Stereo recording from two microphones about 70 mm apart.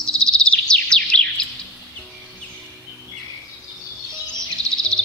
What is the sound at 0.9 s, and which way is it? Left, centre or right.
Music, centre.